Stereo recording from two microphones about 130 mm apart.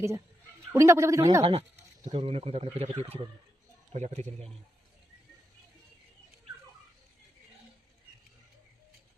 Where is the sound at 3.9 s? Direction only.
60° right (ahead or behind).